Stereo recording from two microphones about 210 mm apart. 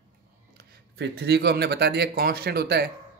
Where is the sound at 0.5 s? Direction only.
50° right (ahead or behind).